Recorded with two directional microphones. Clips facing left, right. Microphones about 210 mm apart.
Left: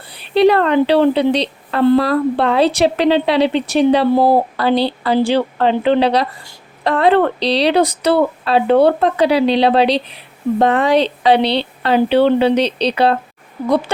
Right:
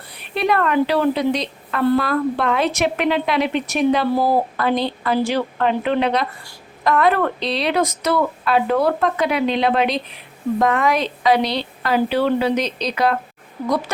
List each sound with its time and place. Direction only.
0.1 s a woman's voice: 30° left (ahead or behind)